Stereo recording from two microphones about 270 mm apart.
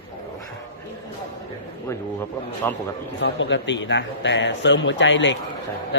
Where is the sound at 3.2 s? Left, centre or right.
Left.